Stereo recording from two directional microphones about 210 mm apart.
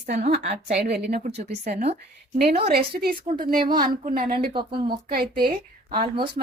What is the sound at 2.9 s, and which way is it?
A woman's voice, 45° right (ahead or behind).